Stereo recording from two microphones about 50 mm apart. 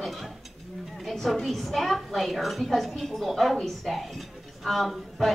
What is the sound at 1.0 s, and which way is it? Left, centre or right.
A woman's voice, centre.